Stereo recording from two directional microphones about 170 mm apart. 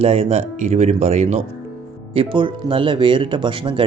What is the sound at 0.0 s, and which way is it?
Speech, 35° right (ahead or behind).